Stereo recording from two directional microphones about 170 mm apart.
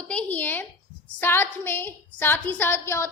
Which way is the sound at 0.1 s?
10° left (ahead or behind).